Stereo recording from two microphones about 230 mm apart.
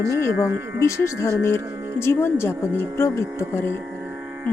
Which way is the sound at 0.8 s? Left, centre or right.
Centre.